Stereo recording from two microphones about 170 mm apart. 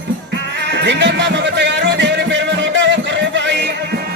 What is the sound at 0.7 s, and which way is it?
Music, 90° right.